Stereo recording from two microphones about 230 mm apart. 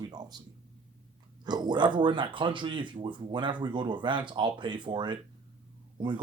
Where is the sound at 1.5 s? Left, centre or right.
Centre.